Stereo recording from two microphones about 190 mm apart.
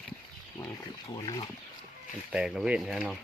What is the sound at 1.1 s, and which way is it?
Speech, 25° left (ahead or behind).